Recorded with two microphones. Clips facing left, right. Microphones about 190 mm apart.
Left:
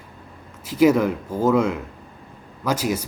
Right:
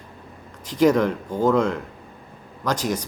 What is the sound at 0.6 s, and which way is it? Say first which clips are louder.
Speech: left 1 dB; 5° left (ahead or behind).